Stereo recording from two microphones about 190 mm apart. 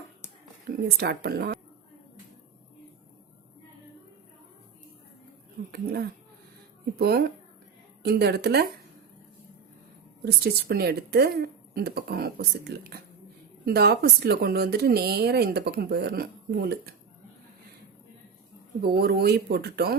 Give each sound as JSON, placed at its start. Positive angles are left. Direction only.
{"t": 0.6, "sound": "speech", "side_deg": -55}
{"t": 5.7, "sound": "speech", "side_deg": -60}
{"t": 10.2, "sound": "speech", "side_deg": -55}
{"t": 18.8, "sound": "speech", "side_deg": -55}